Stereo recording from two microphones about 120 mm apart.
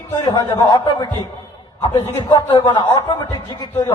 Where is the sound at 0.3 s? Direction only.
35° left (ahead or behind).